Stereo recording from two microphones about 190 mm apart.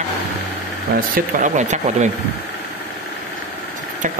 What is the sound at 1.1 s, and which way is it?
Speech, 40° right (ahead or behind).